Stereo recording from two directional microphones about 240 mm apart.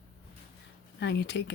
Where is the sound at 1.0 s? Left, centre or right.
Left.